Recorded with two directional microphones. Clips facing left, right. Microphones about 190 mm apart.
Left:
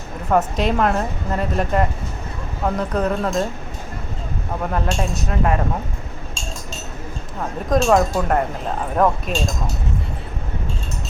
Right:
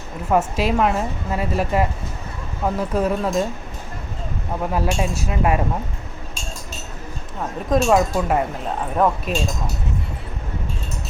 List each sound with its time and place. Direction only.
0.3 s speech: 5° right (ahead or behind)
4.7 s speech: 10° right (ahead or behind)
7.7 s speech: 5° right (ahead or behind)